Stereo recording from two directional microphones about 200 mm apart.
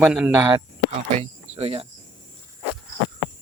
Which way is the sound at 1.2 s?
30° right (ahead or behind).